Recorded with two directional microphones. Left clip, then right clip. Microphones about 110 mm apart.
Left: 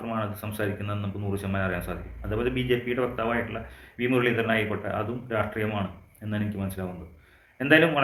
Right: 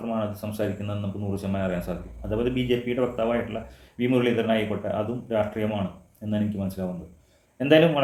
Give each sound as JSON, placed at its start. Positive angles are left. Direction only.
{"t": 0.0, "sound": "speech", "side_deg": -30}